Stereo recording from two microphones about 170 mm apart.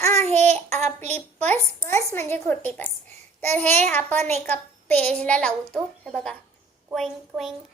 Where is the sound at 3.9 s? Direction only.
10° left (ahead or behind).